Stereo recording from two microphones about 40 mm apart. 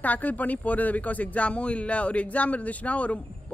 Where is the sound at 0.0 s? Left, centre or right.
Left.